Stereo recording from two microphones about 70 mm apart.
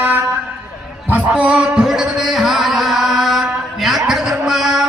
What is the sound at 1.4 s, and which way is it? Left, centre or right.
Music, centre.